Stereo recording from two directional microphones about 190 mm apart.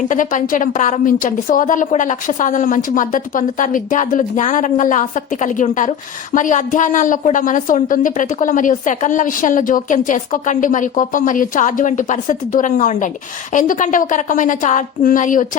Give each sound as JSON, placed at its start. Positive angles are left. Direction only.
{"t": 0.1, "sound": "a woman's voice", "side_deg": 40}